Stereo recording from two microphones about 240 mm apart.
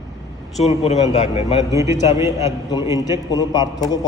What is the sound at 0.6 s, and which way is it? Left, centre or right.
A man's voice, left.